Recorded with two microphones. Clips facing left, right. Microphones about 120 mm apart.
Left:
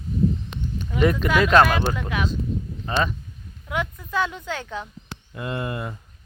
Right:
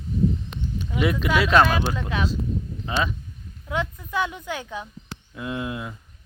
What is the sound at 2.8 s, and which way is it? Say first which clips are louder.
Speech: left 2 dB; 5° right (ahead or behind).